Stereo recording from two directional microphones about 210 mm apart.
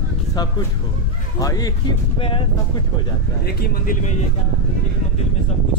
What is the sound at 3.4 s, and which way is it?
Speech, 50° left (ahead or behind).